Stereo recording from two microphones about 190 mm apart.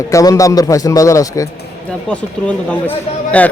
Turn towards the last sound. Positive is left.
turn(degrees=5)  # may be behind; listen again after turning